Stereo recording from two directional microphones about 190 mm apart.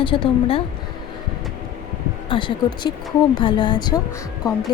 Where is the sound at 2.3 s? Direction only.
25° left (ahead or behind).